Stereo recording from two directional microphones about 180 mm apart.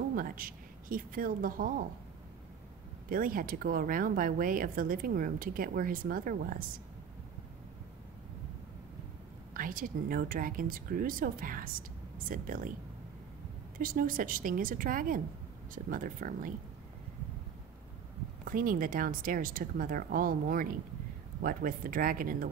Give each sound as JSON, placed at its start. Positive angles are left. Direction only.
{"t": 0.1, "sound": "speech", "side_deg": -50}
{"t": 3.1, "sound": "a woman's voice", "side_deg": -50}
{"t": 9.5, "sound": "a woman's voice", "side_deg": -50}
{"t": 13.7, "sound": "a woman's voice", "side_deg": -50}
{"t": 18.4, "sound": "a woman's voice", "side_deg": -50}